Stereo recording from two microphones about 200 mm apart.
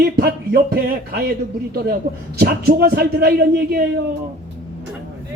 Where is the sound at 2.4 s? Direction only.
50° right (ahead or behind).